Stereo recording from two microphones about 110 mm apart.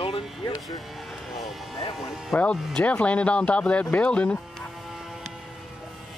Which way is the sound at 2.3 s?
10° left (ahead or behind).